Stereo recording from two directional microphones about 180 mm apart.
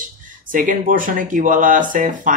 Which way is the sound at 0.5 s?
50° right (ahead or behind).